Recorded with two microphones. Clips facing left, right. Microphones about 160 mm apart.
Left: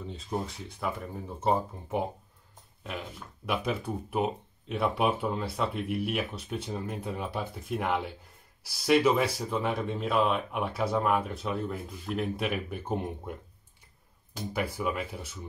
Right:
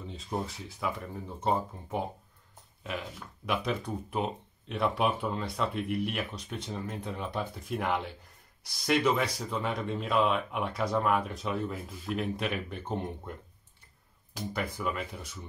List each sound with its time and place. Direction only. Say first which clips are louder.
0.0 s speech: left 1 dB; centre (ahead or behind)
3.4 s speech: left 1 dB; 5° left (ahead or behind)
14.5 s speech: left 3 dB; 10° left (ahead or behind)